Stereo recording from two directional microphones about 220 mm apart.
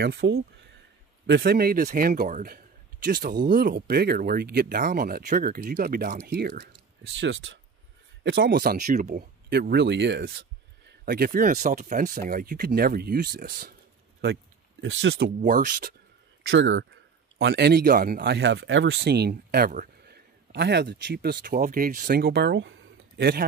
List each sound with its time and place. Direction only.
0.0 s speech: 50° right (ahead or behind)
7.2 s speech: 55° right (ahead or behind)
14.2 s speech: 50° right (ahead or behind)
15.4 s speech: 40° right (ahead or behind)
16.4 s speech: 55° right (ahead or behind)